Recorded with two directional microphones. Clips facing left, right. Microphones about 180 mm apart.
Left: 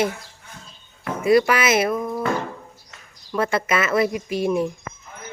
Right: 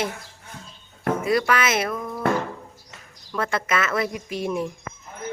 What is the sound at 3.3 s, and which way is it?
Speech, 5° left (ahead or behind).